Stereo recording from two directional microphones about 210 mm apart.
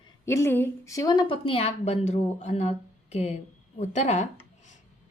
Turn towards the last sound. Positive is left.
turn(degrees=35)  # may be behind; listen again after turning